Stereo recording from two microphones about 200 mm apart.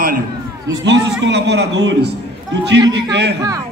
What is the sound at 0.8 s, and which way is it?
A man's voice, 60° right (ahead or behind).